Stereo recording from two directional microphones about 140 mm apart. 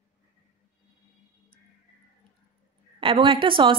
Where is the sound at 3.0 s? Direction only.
40° right (ahead or behind).